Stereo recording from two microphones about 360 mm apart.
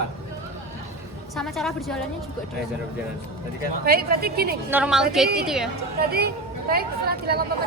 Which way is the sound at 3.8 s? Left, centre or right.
Right.